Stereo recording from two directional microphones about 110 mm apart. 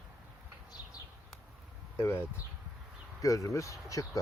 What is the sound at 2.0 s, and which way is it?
Speech, 20° left (ahead or behind).